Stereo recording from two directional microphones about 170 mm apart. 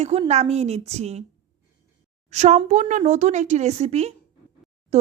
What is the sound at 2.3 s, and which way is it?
A woman's voice, 40° right (ahead or behind).